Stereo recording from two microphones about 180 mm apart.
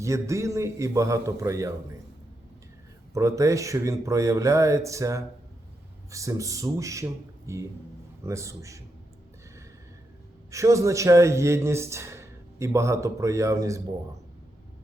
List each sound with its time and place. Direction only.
0.0 s speech: 15° right (ahead or behind)
3.2 s speech: 15° right (ahead or behind)
10.5 s speech: 15° right (ahead or behind)